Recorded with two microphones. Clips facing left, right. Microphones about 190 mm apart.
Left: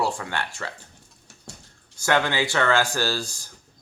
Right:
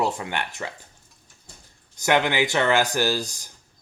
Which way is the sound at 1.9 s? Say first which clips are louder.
Right 2 dB; 20° right (ahead or behind).